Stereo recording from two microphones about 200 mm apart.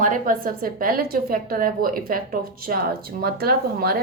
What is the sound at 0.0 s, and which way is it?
A woman's voice, 40° right (ahead or behind).